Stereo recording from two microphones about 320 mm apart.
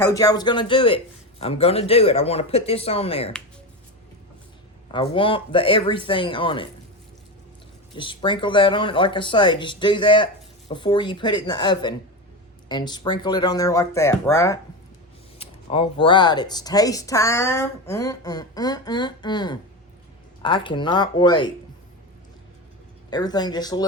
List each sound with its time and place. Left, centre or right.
0.0 s speech: centre
5.1 s speech: centre
7.9 s speech: centre
23.0 s speech: centre